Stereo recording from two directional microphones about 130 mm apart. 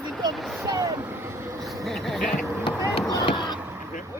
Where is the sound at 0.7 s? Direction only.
25° right (ahead or behind).